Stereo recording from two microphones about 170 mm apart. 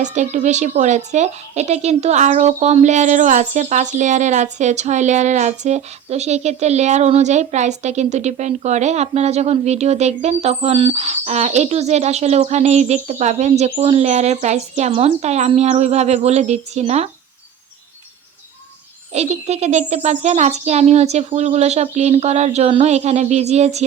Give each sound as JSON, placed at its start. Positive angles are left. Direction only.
{"t": 0.0, "sound": "a woman's voice", "side_deg": -45}
{"t": 19.1, "sound": "a woman's voice", "side_deg": -40}